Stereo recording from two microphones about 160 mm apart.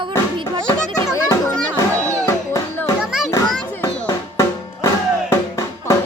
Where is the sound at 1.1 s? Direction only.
20° left (ahead or behind).